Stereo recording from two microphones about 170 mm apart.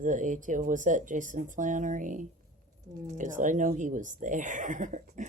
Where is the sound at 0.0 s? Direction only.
50° right (ahead or behind).